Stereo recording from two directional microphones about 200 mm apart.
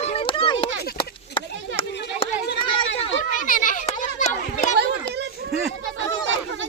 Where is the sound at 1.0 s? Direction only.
25° left (ahead or behind).